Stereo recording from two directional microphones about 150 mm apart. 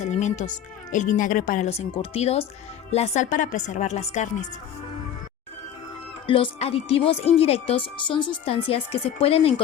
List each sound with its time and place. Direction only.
0.0 s a woman's voice: 50° left (ahead or behind)
6.2 s speech: 35° left (ahead or behind)